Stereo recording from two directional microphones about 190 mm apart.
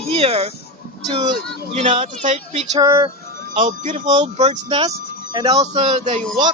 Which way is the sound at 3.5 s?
40° right (ahead or behind).